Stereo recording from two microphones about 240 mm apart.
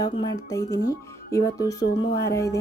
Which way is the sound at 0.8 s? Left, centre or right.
Centre.